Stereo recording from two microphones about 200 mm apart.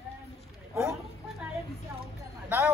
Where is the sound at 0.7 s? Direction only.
15° right (ahead or behind).